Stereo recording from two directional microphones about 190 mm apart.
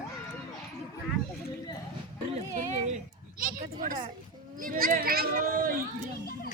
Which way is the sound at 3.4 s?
50° right (ahead or behind).